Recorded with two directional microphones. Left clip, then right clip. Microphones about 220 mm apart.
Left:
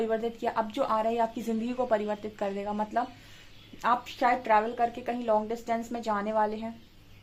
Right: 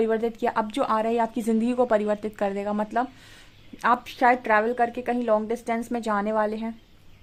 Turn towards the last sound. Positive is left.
turn(degrees=-45)  # may be behind; listen again after turning